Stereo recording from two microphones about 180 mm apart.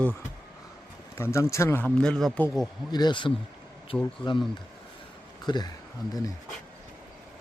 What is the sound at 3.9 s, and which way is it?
Speech, 10° left (ahead or behind).